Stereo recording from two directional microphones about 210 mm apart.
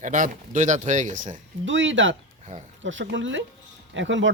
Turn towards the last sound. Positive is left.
turn(degrees=-60)  # may be behind; listen again after turning